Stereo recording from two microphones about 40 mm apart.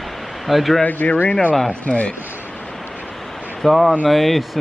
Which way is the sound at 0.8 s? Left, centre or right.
Left.